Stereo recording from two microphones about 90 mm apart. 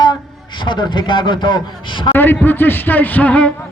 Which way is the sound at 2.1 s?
20° left (ahead or behind).